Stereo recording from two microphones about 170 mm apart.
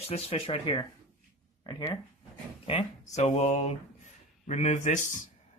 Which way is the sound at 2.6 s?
40° left (ahead or behind).